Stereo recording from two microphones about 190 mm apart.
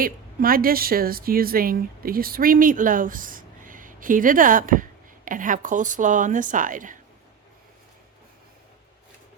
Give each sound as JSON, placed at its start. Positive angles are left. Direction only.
{"t": 0.0, "sound": "a woman's voice", "side_deg": -50}